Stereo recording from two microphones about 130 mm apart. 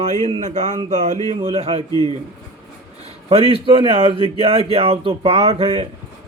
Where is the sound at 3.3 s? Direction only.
45° right (ahead or behind).